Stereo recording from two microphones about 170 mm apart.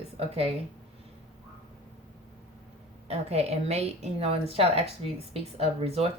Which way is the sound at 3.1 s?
40° right (ahead or behind).